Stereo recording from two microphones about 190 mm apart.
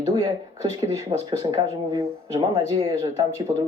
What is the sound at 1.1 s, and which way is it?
Speech, 30° right (ahead or behind).